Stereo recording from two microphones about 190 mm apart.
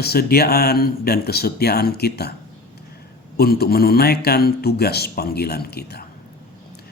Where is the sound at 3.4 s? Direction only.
55° left (ahead or behind).